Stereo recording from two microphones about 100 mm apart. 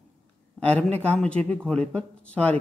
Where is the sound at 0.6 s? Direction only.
15° left (ahead or behind).